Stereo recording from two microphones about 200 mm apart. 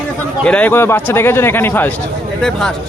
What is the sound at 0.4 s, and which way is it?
A man's voice, 5° left (ahead or behind).